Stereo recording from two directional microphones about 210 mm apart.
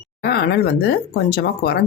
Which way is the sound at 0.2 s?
50° left (ahead or behind).